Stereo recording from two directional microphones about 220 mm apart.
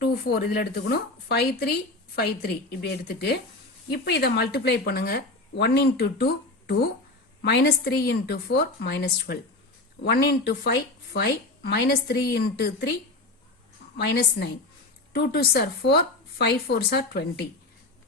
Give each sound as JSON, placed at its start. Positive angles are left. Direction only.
{"t": 0.1, "sound": "speech", "side_deg": 45}
{"t": 7.4, "sound": "speech", "side_deg": 50}
{"t": 14.0, "sound": "speech", "side_deg": 50}